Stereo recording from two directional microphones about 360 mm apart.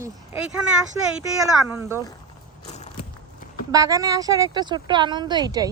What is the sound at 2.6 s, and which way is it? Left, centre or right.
Crushing, centre.